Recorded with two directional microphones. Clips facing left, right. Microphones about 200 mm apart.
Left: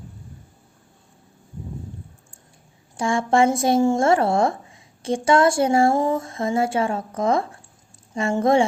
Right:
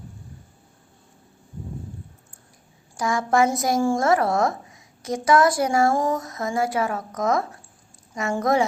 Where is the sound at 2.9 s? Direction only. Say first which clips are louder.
Left 2 dB; 25° left (ahead or behind).